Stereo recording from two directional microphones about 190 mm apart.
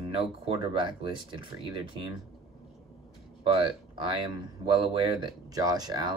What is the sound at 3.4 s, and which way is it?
Speech, 25° right (ahead or behind).